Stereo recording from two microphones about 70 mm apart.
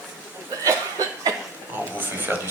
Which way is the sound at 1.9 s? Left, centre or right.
Right.